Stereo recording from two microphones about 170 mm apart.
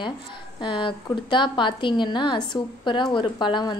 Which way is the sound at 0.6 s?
30° left (ahead or behind).